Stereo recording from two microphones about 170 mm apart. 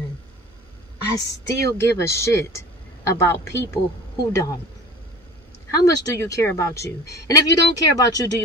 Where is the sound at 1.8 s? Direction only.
15° left (ahead or behind).